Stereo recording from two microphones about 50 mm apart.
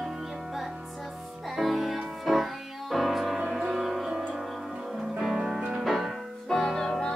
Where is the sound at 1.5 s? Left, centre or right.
Centre.